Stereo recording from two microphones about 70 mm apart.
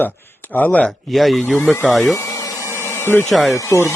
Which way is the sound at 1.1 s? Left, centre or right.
Centre.